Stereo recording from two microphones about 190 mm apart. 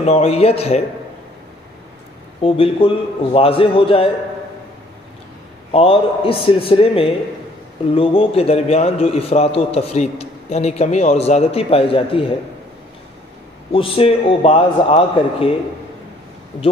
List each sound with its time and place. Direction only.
0.0 s a man's voice: 35° left (ahead or behind)
2.4 s a man's voice: 30° left (ahead or behind)
5.7 s a man's voice: 30° left (ahead or behind)
13.7 s a man's voice: 30° left (ahead or behind)